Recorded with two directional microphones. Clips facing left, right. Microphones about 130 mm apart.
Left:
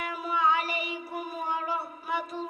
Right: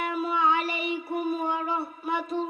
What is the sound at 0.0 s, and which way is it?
Child singing, 25° right (ahead or behind).